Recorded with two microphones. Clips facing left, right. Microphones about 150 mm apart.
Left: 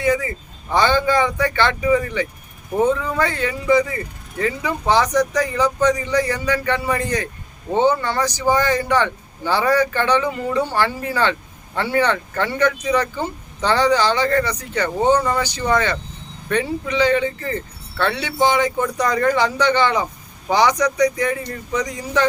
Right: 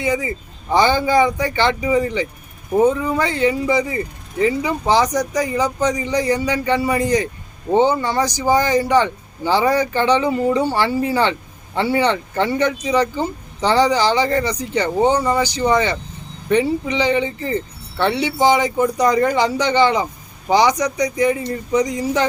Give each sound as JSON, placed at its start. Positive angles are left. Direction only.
{"t": 0.0, "sound": "speech", "side_deg": -15}